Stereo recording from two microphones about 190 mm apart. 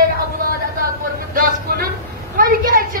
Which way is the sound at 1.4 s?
50° right (ahead or behind).